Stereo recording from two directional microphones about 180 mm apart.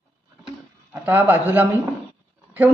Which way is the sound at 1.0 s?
10° right (ahead or behind).